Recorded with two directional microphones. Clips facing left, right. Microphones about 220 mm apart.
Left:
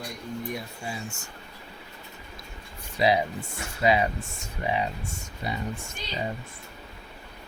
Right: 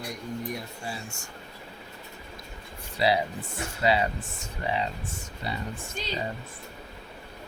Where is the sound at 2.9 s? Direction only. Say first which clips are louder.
Left 2 dB; 15° left (ahead or behind).